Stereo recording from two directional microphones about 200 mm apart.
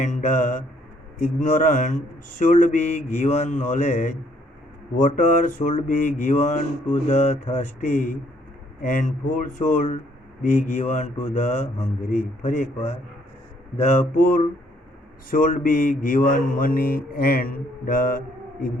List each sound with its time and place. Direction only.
0.0 s speech: 35° left (ahead or behind)
5.1 s speech: 40° left (ahead or behind)
14.1 s speech: 45° left (ahead or behind)